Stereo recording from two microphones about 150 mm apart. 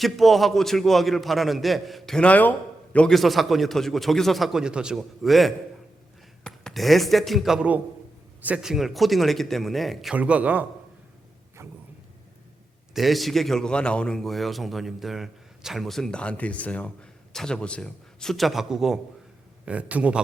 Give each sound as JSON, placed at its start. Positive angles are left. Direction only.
{"t": 0.0, "sound": "a man's voice", "side_deg": 0}
{"t": 11.6, "sound": "vehicle", "side_deg": -20}
{"t": 12.9, "sound": "a man's voice", "side_deg": 0}